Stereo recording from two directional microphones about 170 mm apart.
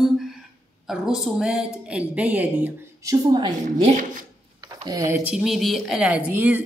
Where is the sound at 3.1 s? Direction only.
25° right (ahead or behind).